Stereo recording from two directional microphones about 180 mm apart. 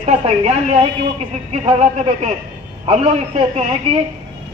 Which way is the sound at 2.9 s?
35° right (ahead or behind).